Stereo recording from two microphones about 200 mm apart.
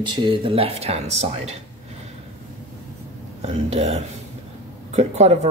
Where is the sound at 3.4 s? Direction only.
30° right (ahead or behind).